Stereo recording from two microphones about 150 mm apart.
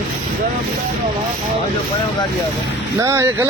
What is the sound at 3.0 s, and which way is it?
Speech, 20° right (ahead or behind).